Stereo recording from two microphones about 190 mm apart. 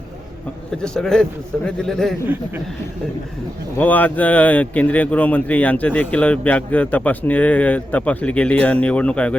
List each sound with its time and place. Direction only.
0.8 s a man's voice: 5° left (ahead or behind)
3.8 s speech: 10° left (ahead or behind)